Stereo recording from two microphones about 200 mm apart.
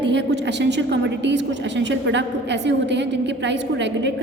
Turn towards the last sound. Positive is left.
turn(degrees=-60)  # may be behind; listen again after turning